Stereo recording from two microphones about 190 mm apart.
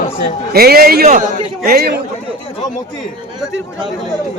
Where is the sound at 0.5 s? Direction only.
50° right (ahead or behind).